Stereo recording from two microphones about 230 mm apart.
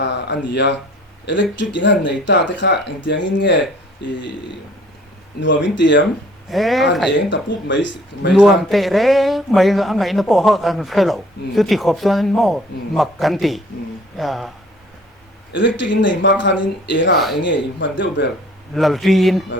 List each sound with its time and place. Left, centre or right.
0.0 s speech: left
5.4 s speech: left
6.5 s speech: centre
8.3 s speech: centre
15.5 s speech: left
18.7 s speech: centre